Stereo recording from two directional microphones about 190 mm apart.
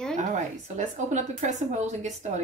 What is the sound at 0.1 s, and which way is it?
A woman's voice, 40° right (ahead or behind).